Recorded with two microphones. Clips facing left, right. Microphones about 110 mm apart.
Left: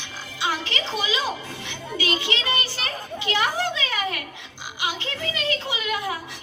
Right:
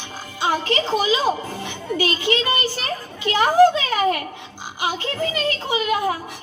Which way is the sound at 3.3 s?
40° right (ahead or behind).